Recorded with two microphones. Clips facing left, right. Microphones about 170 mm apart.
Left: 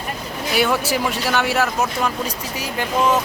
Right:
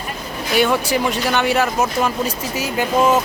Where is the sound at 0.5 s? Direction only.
5° left (ahead or behind).